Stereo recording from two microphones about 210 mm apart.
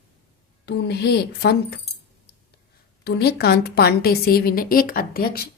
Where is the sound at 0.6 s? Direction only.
50° left (ahead or behind).